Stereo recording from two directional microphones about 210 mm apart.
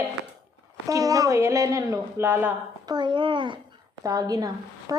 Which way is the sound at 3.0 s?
20° right (ahead or behind).